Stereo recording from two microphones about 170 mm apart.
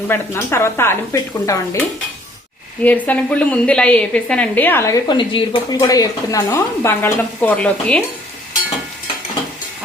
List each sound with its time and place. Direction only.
0.1 s a woman's voice: 15° left (ahead or behind)
2.8 s a woman's voice: 10° left (ahead or behind)